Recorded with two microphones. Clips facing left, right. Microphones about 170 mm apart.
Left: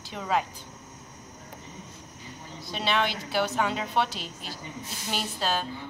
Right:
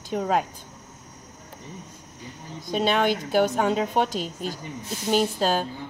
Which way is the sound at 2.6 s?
50° right (ahead or behind).